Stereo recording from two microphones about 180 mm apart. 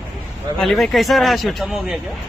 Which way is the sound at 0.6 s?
Centre (ahead or behind).